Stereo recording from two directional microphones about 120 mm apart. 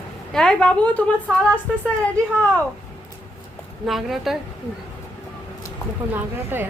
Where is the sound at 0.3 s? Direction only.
5° left (ahead or behind).